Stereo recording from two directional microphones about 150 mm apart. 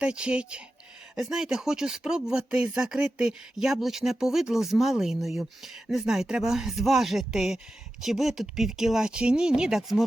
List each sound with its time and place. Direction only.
0.0 s speech: 5° right (ahead or behind)